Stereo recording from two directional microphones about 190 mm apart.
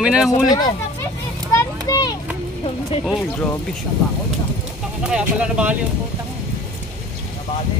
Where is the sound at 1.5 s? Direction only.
15° left (ahead or behind).